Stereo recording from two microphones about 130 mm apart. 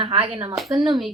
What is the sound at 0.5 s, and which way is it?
Speech, centre (ahead or behind).